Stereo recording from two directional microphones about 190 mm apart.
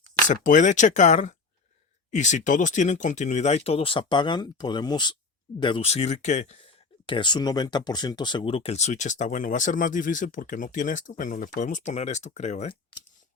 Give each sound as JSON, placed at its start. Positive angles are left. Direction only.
{"t": 0.3, "sound": "speech", "side_deg": 40}
{"t": 7.0, "sound": "speech", "side_deg": 25}